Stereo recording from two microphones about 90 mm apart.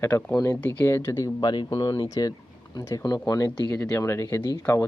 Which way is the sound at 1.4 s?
55° left (ahead or behind).